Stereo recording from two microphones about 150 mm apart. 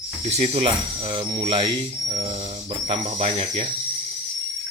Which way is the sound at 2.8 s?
45° right (ahead or behind).